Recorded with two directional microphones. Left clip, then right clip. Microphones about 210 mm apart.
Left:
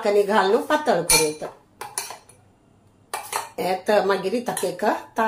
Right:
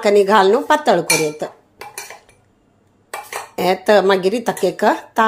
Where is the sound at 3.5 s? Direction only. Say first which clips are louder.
Right 7 dB; 40° right (ahead or behind).